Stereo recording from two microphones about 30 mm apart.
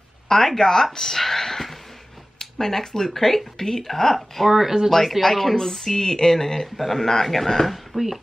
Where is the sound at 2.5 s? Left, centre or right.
Centre.